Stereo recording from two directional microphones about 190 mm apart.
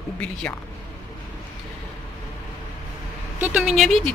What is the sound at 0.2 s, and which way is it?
Speech, 5° left (ahead or behind).